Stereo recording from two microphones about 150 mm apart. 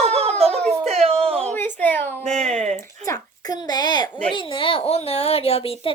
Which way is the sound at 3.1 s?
25° left (ahead or behind).